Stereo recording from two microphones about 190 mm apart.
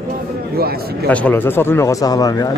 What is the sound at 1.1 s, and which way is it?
Speech, 10° left (ahead or behind).